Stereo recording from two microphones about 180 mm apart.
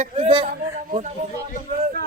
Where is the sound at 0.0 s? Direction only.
35° right (ahead or behind).